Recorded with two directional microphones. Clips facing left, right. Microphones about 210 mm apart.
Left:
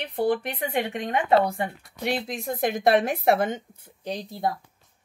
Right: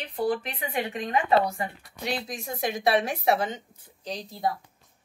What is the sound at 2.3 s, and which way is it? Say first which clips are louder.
A woman's voice: left 4 dB; 55° left (ahead or behind).